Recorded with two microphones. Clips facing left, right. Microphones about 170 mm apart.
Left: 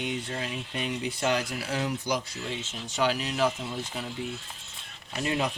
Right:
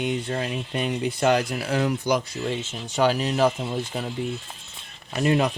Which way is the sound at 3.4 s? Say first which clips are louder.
Right 5 dB; 60° right (ahead or behind).